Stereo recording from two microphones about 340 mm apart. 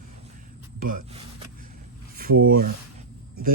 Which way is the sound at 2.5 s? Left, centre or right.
Right.